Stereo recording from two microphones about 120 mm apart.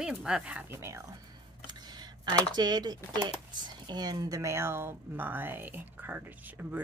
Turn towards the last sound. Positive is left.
turn(degrees=-15)  # may be behind; listen again after turning